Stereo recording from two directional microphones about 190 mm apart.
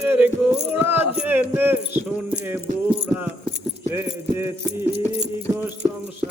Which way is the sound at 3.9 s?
10° right (ahead or behind).